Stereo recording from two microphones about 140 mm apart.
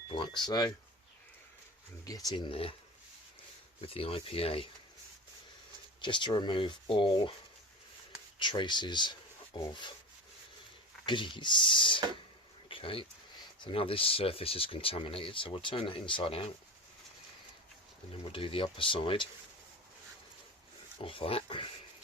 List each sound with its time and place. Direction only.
0.1 s speech: 35° left (ahead or behind)
2.0 s speech: 25° left (ahead or behind)
3.8 s speech: 40° left (ahead or behind)
6.0 s speech: 35° left (ahead or behind)
8.4 s speech: 35° left (ahead or behind)
11.0 s speech: 35° left (ahead or behind)
12.6 s a sound: 40° left (ahead or behind)
13.6 s speech: 40° left (ahead or behind)
18.1 s speech: 40° left (ahead or behind)
21.0 s speech: 40° left (ahead or behind)